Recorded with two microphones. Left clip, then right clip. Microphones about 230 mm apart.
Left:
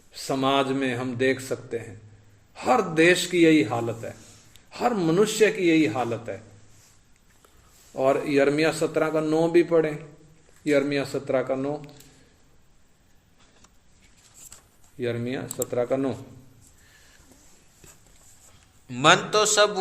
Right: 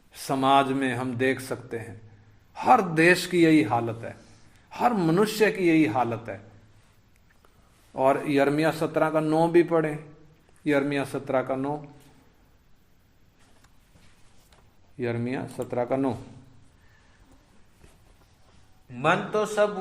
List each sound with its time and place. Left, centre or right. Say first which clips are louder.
0.1 s a man's voice: right 2 dB; centre
7.9 s a man's voice: left 1 dB; centre
14.9 s a man's voice: left 1 dB; centre
18.9 s speech: left 5 dB; left